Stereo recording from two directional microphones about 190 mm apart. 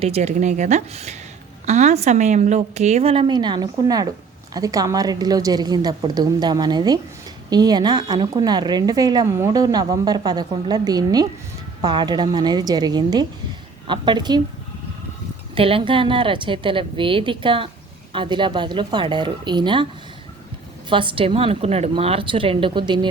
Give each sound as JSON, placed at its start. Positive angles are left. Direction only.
{"t": 0.0, "sound": "a woman's voice", "side_deg": -35}
{"t": 15.5, "sound": "a woman's voice", "side_deg": -30}
{"t": 20.9, "sound": "a woman's voice", "side_deg": -25}